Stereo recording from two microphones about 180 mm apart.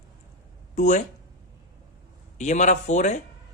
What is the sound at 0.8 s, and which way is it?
Speech, 40° left (ahead or behind).